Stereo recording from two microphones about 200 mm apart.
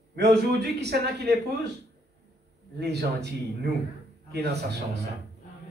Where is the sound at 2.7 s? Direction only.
55° right (ahead or behind).